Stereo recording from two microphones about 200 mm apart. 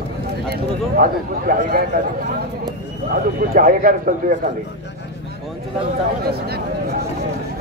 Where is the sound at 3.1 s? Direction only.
45° right (ahead or behind).